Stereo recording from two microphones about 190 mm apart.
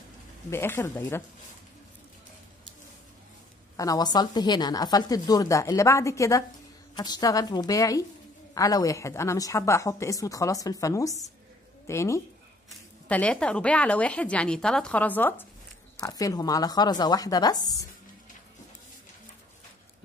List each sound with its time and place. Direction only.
0.5 s speech: 15° left (ahead or behind)
3.7 s a woman's voice: 20° left (ahead or behind)